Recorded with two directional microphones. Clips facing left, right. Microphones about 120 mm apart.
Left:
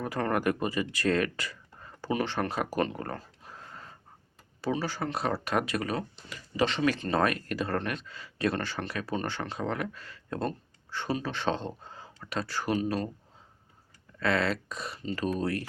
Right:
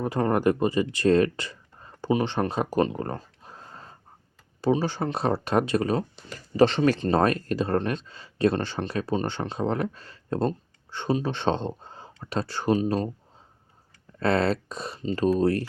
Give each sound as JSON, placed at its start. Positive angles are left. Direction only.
{"t": 0.0, "sound": "speech", "side_deg": -25}
{"t": 14.2, "sound": "speech", "side_deg": -35}